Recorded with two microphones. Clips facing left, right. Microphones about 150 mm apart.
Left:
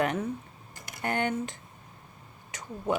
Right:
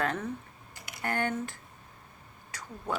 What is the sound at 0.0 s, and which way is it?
A woman's voice, 15° left (ahead or behind).